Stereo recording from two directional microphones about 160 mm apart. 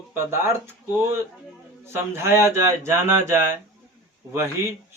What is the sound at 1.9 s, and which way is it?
Speech, 15° right (ahead or behind).